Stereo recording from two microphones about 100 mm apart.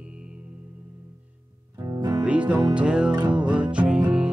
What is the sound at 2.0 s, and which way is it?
Music, 10° right (ahead or behind).